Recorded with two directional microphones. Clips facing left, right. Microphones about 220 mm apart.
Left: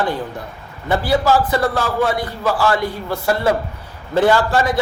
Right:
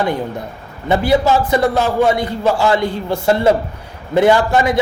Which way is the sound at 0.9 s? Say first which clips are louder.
Right 3 dB; 20° right (ahead or behind).